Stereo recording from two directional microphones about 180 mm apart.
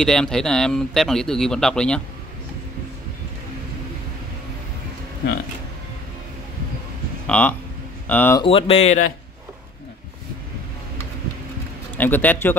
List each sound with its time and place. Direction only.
0.0 s speech: 5° left (ahead or behind)
7.2 s a man's voice: 10° left (ahead or behind)
8.4 s speech: 30° left (ahead or behind)
12.0 s a man's voice: 10° left (ahead or behind)